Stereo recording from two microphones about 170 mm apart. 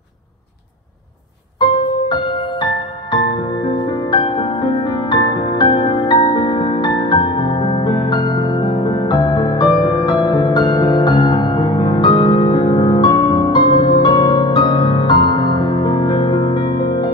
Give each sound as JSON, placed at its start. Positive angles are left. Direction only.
{"t": 3.6, "sound": "music", "side_deg": 25}